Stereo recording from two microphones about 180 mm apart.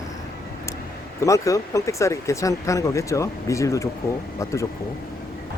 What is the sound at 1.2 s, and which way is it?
Speech, 15° left (ahead or behind).